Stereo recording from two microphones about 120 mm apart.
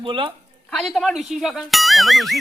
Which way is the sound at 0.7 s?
Centre (ahead or behind).